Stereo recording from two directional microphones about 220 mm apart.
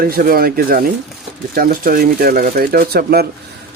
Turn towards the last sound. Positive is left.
turn(degrees=-45)  # may be behind; listen again after turning